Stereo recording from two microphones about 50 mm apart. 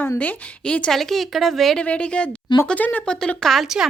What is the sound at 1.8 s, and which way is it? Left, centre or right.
Speech, left.